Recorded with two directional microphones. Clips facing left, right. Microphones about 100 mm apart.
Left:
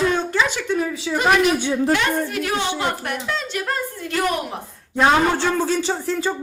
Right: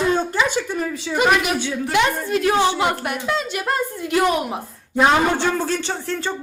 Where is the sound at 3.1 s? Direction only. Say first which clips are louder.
Right 3 dB; 15° right (ahead or behind).